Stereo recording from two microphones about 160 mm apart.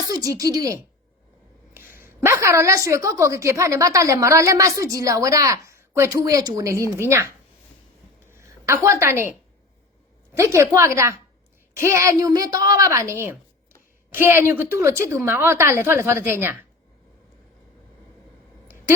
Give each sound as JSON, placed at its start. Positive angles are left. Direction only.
{"t": 0.1, "sound": "a woman's voice", "side_deg": -20}
{"t": 8.3, "sound": "a woman's voice", "side_deg": -15}
{"t": 10.3, "sound": "a woman's voice", "side_deg": -15}